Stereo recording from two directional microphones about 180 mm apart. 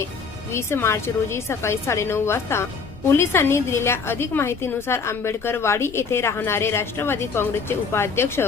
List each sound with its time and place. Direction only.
0.5 s a woman's voice: 15° left (ahead or behind)